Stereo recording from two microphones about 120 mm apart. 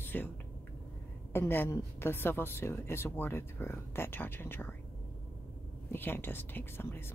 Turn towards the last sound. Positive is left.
turn(degrees=20)  # may be behind; listen again after turning